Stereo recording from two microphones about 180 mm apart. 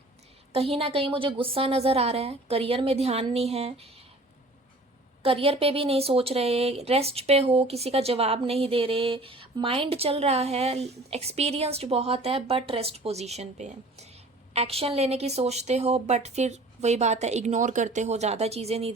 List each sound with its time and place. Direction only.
0.5 s speech: 30° right (ahead or behind)
5.2 s speech: 30° right (ahead or behind)